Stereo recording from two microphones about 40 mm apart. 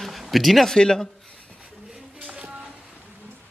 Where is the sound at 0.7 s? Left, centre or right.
Centre.